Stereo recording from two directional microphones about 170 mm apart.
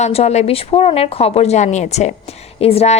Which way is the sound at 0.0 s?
40° left (ahead or behind).